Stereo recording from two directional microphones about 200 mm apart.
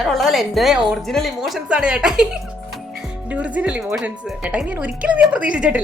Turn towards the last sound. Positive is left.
turn(degrees=-5)  # may be behind; listen again after turning